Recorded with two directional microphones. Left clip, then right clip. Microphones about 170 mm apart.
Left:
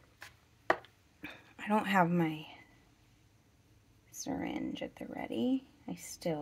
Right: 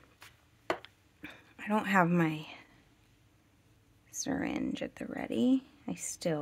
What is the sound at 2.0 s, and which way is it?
Speech, 35° right (ahead or behind).